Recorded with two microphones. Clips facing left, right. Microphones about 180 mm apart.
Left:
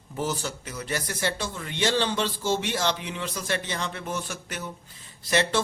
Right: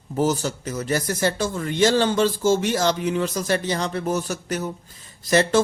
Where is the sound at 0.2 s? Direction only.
40° right (ahead or behind).